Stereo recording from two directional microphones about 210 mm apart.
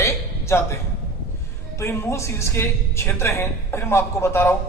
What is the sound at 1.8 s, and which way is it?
A woman's voice, 15° left (ahead or behind).